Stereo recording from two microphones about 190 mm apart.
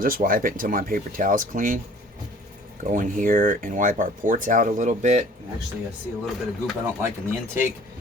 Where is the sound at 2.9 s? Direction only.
45° right (ahead or behind).